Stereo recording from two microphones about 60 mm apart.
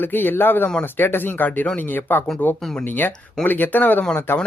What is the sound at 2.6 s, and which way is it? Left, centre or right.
Speech, centre.